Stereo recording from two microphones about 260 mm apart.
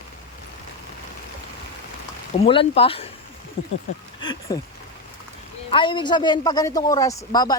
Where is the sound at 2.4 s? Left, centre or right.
Left.